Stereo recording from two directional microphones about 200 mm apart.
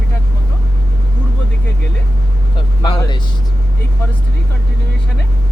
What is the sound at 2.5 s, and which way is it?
Vehicle, 20° left (ahead or behind).